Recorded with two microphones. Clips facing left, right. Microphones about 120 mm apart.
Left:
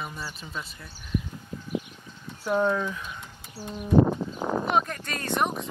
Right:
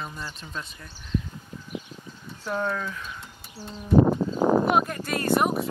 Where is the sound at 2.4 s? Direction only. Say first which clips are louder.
Left 4 dB; 10° left (ahead or behind).